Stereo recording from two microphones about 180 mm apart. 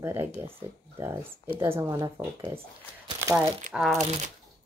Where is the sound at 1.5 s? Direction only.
15° right (ahead or behind).